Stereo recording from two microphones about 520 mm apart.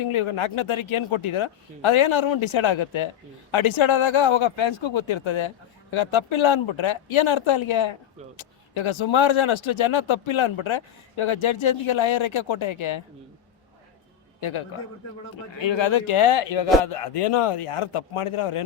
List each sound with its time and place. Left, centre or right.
0.0 s speech: left
15.5 s a man's voice: left